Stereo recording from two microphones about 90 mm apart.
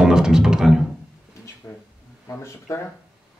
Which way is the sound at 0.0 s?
5° right (ahead or behind).